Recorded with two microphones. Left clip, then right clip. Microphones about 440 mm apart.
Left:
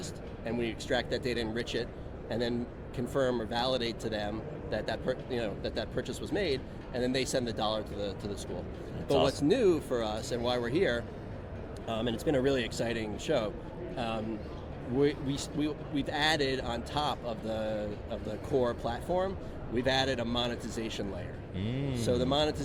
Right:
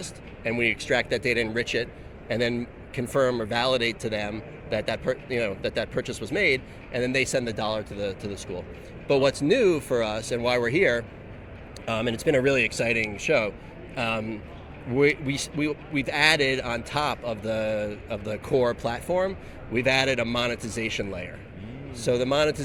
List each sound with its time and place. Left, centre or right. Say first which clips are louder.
0.0 s a man's voice: right 7 dB; right